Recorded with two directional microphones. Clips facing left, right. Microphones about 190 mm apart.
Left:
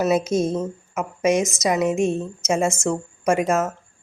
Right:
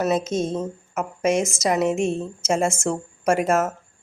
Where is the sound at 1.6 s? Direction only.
Centre (ahead or behind).